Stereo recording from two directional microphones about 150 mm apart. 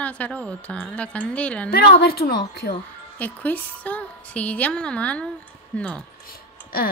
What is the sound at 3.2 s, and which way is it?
Speech, 10° left (ahead or behind).